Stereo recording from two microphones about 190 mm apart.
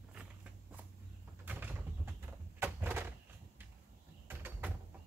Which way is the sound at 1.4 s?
10° right (ahead or behind).